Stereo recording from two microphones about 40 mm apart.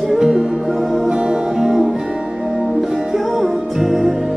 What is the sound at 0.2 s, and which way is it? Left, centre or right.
Music, right.